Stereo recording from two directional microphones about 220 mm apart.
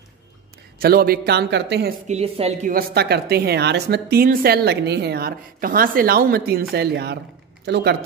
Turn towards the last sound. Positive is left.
turn(degrees=-50)  # may be behind; listen again after turning